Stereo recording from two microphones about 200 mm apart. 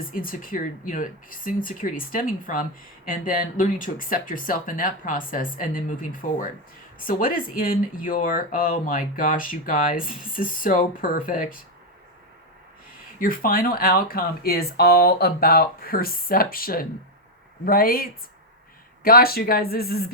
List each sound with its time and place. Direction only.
0.1 s speech: 45° left (ahead or behind)
13.1 s speech: 45° left (ahead or behind)